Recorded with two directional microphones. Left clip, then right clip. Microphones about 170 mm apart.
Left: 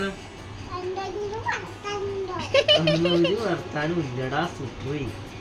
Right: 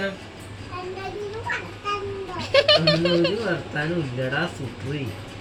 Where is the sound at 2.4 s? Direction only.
5° left (ahead or behind).